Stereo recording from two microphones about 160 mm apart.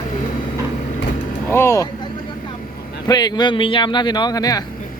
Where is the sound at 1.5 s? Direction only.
15° left (ahead or behind).